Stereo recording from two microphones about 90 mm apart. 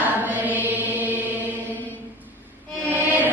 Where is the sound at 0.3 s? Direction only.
20° right (ahead or behind).